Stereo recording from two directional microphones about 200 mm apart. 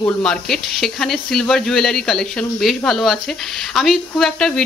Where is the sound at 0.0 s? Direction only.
5° left (ahead or behind).